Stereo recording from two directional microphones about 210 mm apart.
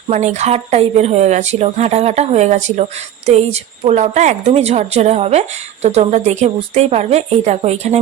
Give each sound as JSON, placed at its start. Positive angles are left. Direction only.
{"t": 0.1, "sound": "a woman's voice", "side_deg": -35}